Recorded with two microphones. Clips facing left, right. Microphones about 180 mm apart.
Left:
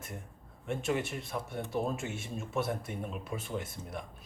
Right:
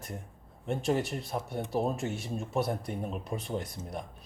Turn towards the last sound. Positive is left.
turn(degrees=-35)  # may be behind; listen again after turning